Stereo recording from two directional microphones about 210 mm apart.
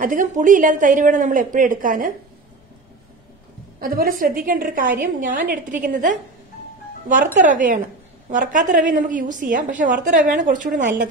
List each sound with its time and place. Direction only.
0.0 s a woman's voice: 40° right (ahead or behind)
3.8 s a woman's voice: 45° right (ahead or behind)
7.3 s a woman's voice: 40° right (ahead or behind)